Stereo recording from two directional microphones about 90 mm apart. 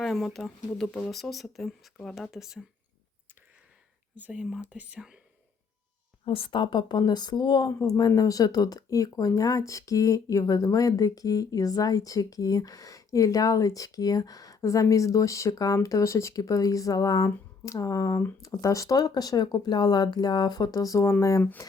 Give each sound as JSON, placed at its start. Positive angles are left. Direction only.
{"t": 0.0, "sound": "speech", "side_deg": 0}
{"t": 4.1, "sound": "speech", "side_deg": -15}
{"t": 6.2, "sound": "speech", "side_deg": 80}